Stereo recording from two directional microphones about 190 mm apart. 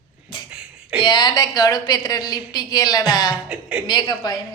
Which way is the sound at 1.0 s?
25° left (ahead or behind).